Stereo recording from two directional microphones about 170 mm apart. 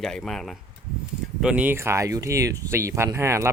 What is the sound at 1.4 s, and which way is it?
Speech, 10° right (ahead or behind).